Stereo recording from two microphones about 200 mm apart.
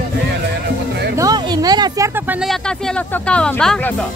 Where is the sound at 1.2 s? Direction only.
20° right (ahead or behind).